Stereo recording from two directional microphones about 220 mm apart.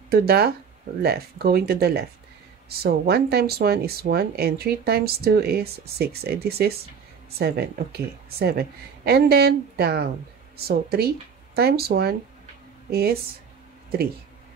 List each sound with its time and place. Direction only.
0.1 s speech: 45° right (ahead or behind)